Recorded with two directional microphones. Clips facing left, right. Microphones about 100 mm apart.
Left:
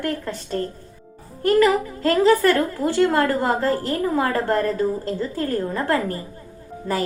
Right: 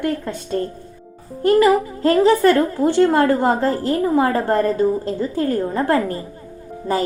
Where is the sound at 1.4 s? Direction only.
25° right (ahead or behind).